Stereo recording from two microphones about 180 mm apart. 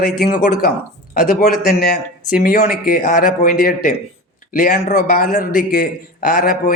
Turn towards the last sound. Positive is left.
turn(degrees=50)  # may be behind; listen again after turning